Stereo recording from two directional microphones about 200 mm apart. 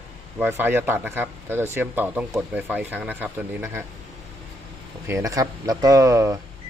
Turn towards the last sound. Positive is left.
turn(degrees=-15)  # may be behind; listen again after turning